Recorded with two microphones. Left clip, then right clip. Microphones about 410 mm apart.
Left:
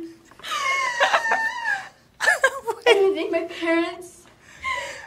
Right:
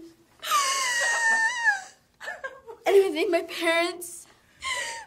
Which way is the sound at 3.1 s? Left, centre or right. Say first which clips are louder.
Left 1 dB; right.